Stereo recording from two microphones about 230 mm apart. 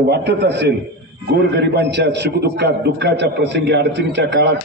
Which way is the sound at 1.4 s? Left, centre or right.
Right.